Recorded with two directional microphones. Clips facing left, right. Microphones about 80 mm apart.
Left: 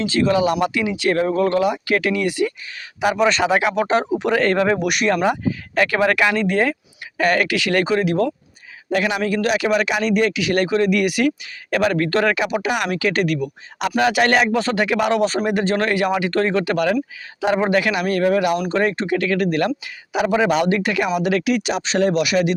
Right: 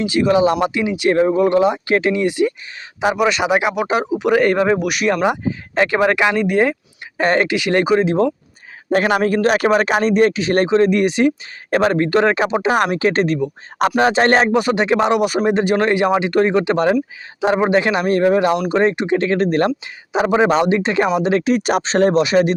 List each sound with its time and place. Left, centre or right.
0.0 s speech: centre
3.2 s speech: centre
4.8 s speech: centre
5.1 s speech: centre
7.2 s speech: right
8.9 s speech: right
14.5 s speech: centre; by 22.5 s right